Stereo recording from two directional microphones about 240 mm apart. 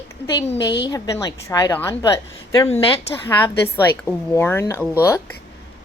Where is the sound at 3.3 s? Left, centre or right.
Centre.